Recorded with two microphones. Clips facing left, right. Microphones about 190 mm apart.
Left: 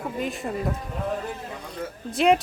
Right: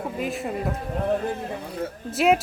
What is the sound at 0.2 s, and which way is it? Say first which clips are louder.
Speech: right 1 dB; centre (ahead or behind).